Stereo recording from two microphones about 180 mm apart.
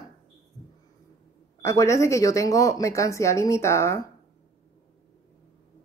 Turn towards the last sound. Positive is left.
turn(degrees=15)  # may be behind; listen again after turning